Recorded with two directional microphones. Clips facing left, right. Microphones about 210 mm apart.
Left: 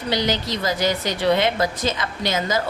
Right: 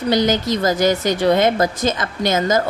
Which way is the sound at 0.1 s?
45° right (ahead or behind).